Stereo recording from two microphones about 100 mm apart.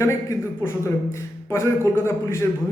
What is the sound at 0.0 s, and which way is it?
A man's voice, 30° left (ahead or behind).